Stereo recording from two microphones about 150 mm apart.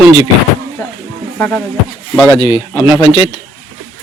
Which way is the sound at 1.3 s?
10° left (ahead or behind).